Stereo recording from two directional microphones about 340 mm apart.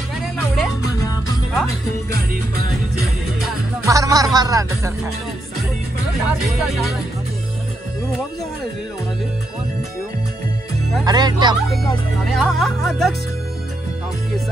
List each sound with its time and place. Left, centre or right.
0.6 s music: centre
3.3 s speech: centre
6.4 s speech: centre
11.1 s speech: centre
12.4 s speech: centre